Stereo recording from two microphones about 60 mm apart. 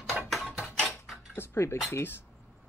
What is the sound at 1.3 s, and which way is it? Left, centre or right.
Cutlery, left.